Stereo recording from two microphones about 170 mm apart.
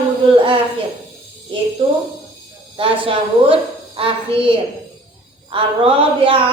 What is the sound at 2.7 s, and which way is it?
A woman's voice, 30° right (ahead or behind).